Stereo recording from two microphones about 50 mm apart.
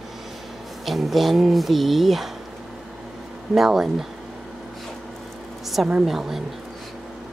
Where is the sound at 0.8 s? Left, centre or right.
Centre.